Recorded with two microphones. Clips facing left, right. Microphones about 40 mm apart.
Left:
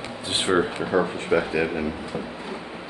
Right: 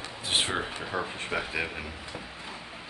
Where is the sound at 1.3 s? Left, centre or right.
Centre.